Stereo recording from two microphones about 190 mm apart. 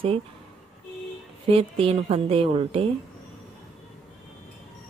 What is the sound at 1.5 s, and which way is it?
Speech, 30° right (ahead or behind).